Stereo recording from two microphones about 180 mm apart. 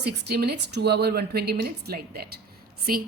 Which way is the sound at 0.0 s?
65° right (ahead or behind).